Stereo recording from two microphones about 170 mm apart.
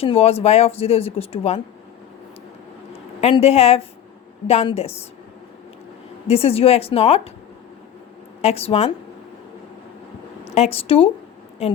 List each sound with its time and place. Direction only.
0.0 s a woman's voice: 35° left (ahead or behind)
3.2 s a woman's voice: 35° left (ahead or behind)
6.2 s a woman's voice: 35° left (ahead or behind)
8.4 s a woman's voice: 35° left (ahead or behind)
10.5 s a woman's voice: 35° left (ahead or behind)